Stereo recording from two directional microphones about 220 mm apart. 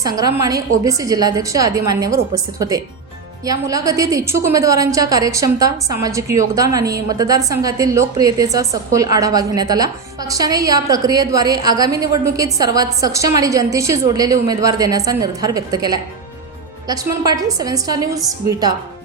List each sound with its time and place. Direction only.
0.2 s a woman's voice: 15° right (ahead or behind)